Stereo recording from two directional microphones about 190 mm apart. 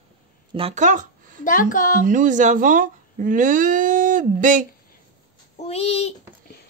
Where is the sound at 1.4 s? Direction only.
45° left (ahead or behind).